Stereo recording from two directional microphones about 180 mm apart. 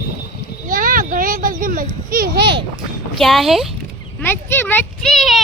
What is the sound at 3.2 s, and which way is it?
Speech, centre (ahead or behind).